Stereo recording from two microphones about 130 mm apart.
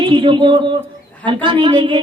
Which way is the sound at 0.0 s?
40° right (ahead or behind).